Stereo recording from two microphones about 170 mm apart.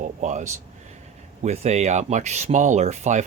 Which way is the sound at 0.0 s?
45° right (ahead or behind).